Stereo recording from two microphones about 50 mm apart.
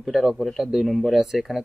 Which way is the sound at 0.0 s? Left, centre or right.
Centre.